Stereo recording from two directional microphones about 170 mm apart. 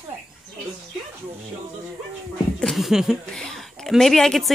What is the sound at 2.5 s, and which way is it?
A woman's voice, centre (ahead or behind).